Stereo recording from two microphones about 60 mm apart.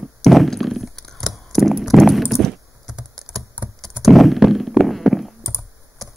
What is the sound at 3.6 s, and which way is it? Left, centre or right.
Computer keyboard, right.